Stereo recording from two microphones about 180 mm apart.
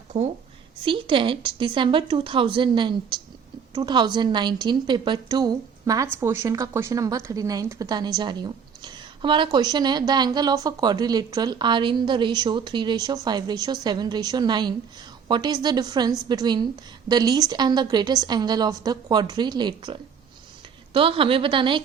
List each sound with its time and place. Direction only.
0.1 s a woman's voice: 40° right (ahead or behind)
0.9 s speech: 25° right (ahead or behind)